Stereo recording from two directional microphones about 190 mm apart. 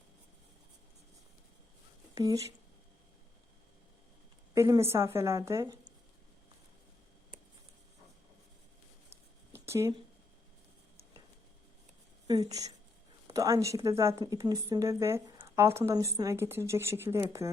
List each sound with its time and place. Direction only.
2.1 s speech: 20° right (ahead or behind)
4.5 s speech: 15° right (ahead or behind)
9.5 s a sound: 15° right (ahead or behind)
12.3 s speech: 20° right (ahead or behind)